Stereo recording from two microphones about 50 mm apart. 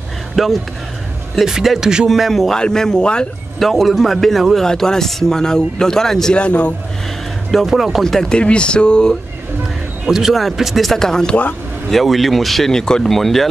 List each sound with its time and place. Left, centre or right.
0.4 s a man's voice: centre
2.0 s speech: centre
3.5 s speech: centre
4.6 s speech: centre
6.3 s a man's voice: left
7.5 s speech: centre
8.0 s speech: centre
10.0 s speech: centre
10.9 s speech: centre
11.9 s speech: centre